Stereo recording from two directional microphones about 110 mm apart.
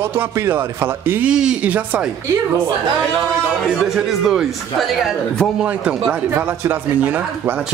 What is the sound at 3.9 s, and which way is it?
Speech, 5° right (ahead or behind).